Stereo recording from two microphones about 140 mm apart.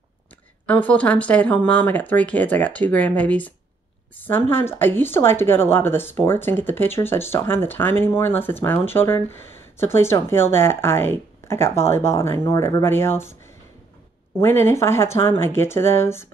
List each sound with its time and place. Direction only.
0.7 s speech: 10° left (ahead or behind)
14.4 s speech: 20° left (ahead or behind)